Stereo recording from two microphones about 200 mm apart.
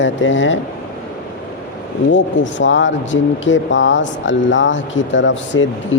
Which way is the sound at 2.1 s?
70° left (ahead or behind).